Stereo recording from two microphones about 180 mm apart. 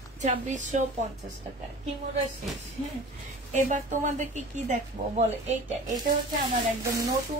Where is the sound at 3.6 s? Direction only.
45° right (ahead or behind).